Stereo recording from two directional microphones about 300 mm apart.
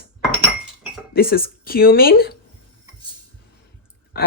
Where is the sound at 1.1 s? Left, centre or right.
Left.